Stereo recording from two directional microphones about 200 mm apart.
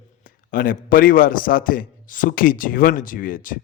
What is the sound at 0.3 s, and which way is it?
A man's voice, 45° left (ahead or behind).